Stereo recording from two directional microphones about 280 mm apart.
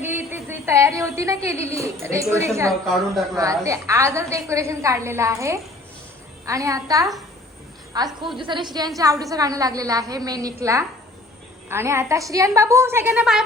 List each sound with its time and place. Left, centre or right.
0.0 s a sound: centre
1.7 s a woman's voice: centre
2.8 s a woman's voice: centre
3.3 s a woman's voice: centre